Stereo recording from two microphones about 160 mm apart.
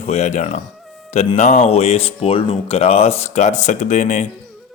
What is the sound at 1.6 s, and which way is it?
Speech, 40° left (ahead or behind).